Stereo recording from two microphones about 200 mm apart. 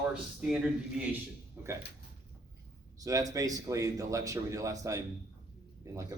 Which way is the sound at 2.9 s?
15° right (ahead or behind).